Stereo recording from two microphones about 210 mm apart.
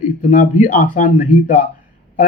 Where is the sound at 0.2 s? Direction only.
40° left (ahead or behind).